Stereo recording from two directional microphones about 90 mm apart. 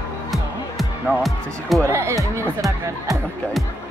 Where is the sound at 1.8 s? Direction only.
30° right (ahead or behind).